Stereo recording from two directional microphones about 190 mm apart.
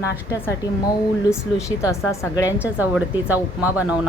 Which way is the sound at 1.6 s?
15° left (ahead or behind).